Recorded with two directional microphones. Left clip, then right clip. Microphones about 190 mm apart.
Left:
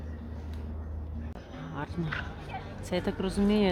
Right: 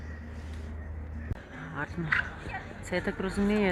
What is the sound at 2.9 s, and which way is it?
Speech, 10° left (ahead or behind).